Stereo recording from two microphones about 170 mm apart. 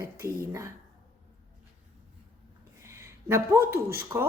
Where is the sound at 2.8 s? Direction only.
15° right (ahead or behind).